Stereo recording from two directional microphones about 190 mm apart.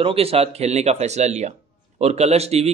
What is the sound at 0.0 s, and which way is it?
Speech, 30° right (ahead or behind).